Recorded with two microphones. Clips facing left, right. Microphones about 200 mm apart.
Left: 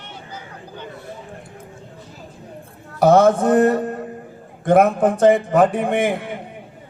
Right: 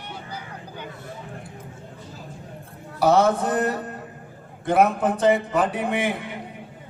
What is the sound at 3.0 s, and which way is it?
A man's voice, 50° left (ahead or behind).